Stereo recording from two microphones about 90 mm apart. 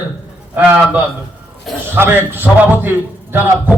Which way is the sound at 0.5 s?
15° right (ahead or behind).